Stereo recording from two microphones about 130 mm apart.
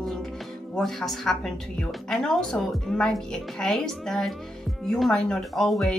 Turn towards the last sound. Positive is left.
turn(degrees=0)  # may be behind; listen again after turning